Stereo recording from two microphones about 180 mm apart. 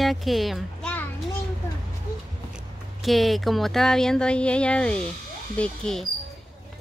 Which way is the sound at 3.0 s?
Centre (ahead or behind).